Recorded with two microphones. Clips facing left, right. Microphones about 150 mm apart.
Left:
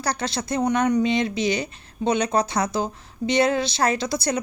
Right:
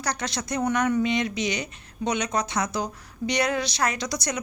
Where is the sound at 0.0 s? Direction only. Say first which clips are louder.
Left 3 dB; 30° left (ahead or behind).